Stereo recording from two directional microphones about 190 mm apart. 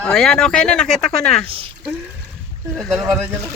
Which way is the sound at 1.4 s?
30° right (ahead or behind).